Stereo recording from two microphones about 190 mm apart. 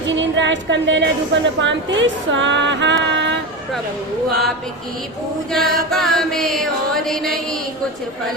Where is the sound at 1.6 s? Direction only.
75° right (ahead or behind).